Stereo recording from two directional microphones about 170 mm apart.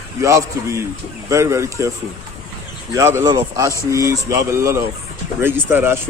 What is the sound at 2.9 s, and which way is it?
Speech, 15° right (ahead or behind).